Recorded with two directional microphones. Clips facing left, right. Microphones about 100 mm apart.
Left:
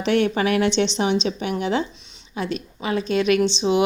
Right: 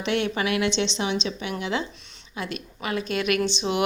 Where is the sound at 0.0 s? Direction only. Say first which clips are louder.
Left 5 dB; 40° left (ahead or behind).